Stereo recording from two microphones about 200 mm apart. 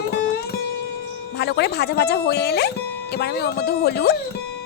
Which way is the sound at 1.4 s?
55° left (ahead or behind).